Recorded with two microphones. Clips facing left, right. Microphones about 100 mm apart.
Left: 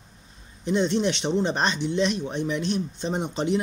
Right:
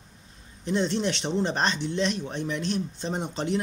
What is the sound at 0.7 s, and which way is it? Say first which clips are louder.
Speech: left 3 dB; centre (ahead or behind).